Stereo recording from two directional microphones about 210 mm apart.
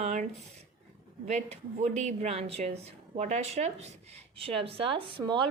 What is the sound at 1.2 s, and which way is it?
Speech, 30° right (ahead or behind).